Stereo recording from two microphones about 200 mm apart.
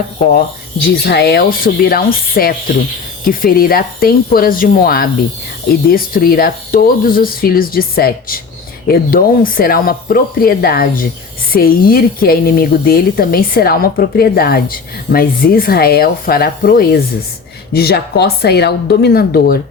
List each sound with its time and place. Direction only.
1.0 s a woman's voice: 55° left (ahead or behind)